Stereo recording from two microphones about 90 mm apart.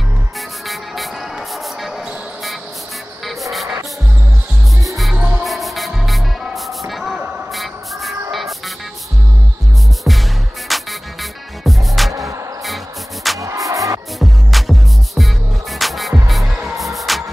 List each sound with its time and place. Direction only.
1.5 s music: centre (ahead or behind)
4.8 s music: centre (ahead or behind)
5.1 s music: 15° right (ahead or behind)
5.4 s music: centre (ahead or behind)
6.9 s a sound: 5° right (ahead or behind)
7.5 s music: centre (ahead or behind)
10.1 s music: centre (ahead or behind)
12.1 s music: 35° right (ahead or behind)
12.6 s music: centre (ahead or behind)
13.4 s music: 35° right (ahead or behind)
14.2 s music: centre (ahead or behind)